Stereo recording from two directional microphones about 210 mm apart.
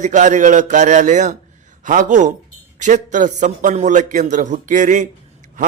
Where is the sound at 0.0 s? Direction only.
35° right (ahead or behind).